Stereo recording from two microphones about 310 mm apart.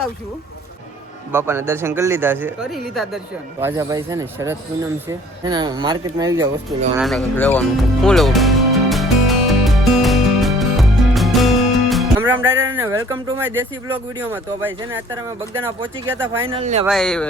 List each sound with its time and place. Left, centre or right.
1.3 s speech: centre
6.7 s music: centre
12.6 s speech: centre
14.8 s speech: right
15.2 s speech: centre
16.5 s speech: centre
16.8 s speech: centre